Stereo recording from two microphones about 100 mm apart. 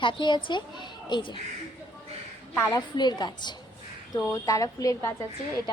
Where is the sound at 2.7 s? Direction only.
45° left (ahead or behind).